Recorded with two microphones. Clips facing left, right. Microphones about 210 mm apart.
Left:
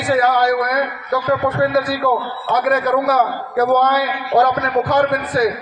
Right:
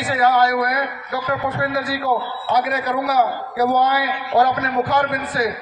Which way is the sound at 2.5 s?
50° left (ahead or behind).